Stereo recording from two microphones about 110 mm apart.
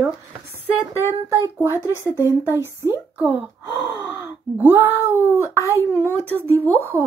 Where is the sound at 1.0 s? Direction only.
30° left (ahead or behind).